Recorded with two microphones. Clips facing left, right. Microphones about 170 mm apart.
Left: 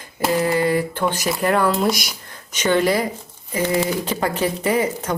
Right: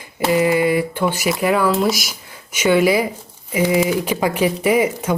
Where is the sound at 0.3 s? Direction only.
10° right (ahead or behind).